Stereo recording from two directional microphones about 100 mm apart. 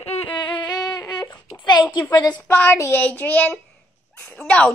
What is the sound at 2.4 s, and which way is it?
A woman's voice, 20° left (ahead or behind).